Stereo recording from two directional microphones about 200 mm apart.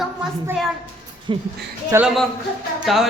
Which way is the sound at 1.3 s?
25° right (ahead or behind).